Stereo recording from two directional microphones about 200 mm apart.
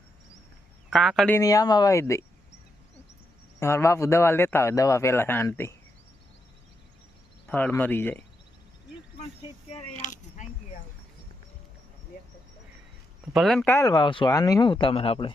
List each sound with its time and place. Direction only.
0.9 s speech: centre (ahead or behind)
1.4 s a man's voice: 15° left (ahead or behind)
3.6 s a man's voice: 15° left (ahead or behind)
7.4 s a man's voice: 10° left (ahead or behind)
10.0 s keys jangling: 40° left (ahead or behind)
13.3 s speech: centre (ahead or behind)
13.7 s speech: 15° left (ahead or behind)